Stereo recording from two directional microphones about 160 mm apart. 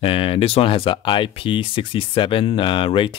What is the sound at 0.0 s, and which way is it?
Speech, 35° left (ahead or behind).